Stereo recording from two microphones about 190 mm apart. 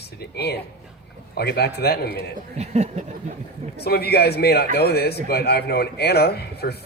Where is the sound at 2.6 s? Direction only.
35° right (ahead or behind).